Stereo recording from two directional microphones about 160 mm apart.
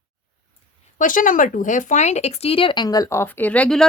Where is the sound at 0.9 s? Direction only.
55° left (ahead or behind).